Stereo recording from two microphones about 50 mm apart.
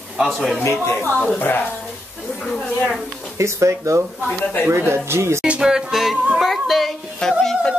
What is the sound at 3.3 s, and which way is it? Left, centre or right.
Speech, right.